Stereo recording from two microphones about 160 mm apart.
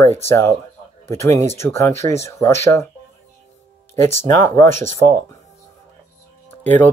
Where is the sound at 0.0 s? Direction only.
15° left (ahead or behind).